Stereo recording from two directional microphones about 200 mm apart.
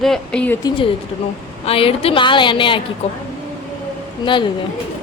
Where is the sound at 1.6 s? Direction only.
30° left (ahead or behind).